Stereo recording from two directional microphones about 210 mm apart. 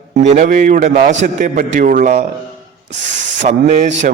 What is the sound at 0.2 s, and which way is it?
A man's voice, 35° right (ahead or behind).